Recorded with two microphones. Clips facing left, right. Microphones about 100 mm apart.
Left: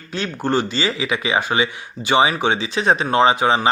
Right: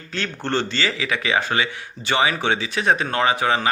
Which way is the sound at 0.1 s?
15° left (ahead or behind).